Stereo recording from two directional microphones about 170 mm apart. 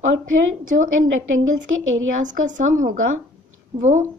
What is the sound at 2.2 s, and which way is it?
Speech, 50° right (ahead or behind).